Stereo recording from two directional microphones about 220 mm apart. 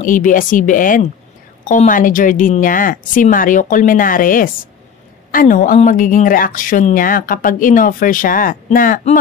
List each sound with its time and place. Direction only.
0.0 s speech: 35° left (ahead or behind)